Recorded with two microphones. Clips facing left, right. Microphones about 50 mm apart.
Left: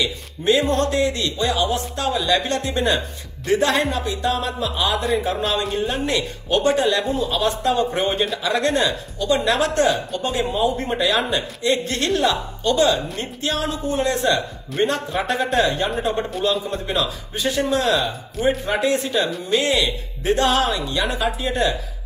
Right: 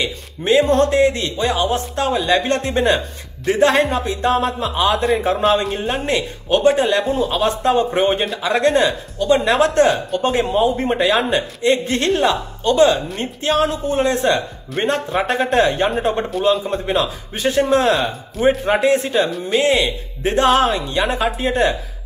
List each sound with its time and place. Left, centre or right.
0.0 s a man's voice: right